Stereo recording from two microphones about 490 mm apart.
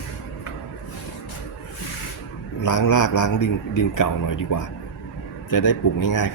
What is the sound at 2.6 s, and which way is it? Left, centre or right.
A man's voice, left.